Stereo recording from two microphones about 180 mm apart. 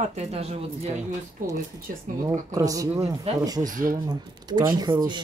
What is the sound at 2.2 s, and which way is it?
Speech, 20° right (ahead or behind).